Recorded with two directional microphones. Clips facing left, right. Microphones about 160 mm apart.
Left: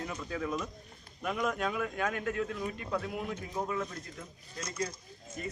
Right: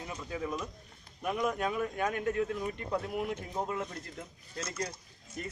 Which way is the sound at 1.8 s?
30° right (ahead or behind).